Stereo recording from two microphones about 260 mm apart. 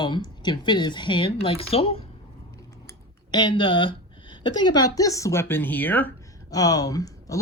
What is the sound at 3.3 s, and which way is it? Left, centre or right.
A woman's voice, centre.